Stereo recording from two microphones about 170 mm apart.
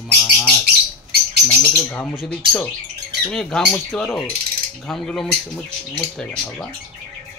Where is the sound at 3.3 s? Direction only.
5° left (ahead or behind).